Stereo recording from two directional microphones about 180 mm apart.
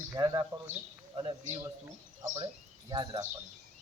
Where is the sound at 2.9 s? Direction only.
20° right (ahead or behind).